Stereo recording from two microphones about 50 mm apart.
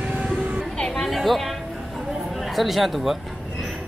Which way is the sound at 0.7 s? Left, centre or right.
Centre.